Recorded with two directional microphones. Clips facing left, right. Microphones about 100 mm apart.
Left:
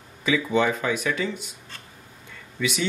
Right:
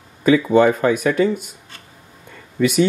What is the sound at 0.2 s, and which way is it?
Speech, 50° right (ahead or behind).